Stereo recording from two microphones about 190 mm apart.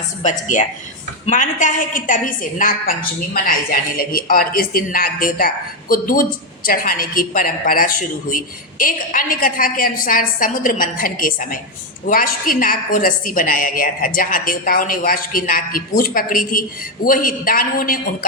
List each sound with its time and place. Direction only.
0.2 s a woman's voice: 40° left (ahead or behind)